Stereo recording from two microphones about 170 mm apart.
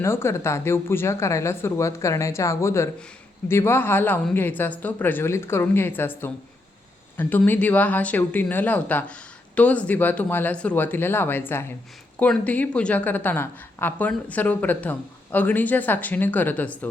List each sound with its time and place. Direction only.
0.0 s a woman's voice: 15° left (ahead or behind)